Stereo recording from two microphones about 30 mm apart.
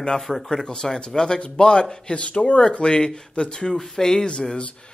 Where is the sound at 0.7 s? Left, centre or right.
Left.